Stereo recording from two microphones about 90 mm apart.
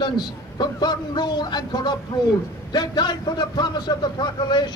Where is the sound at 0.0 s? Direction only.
55° left (ahead or behind).